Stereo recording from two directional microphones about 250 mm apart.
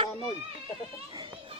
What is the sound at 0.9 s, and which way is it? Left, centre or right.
Children playing, centre.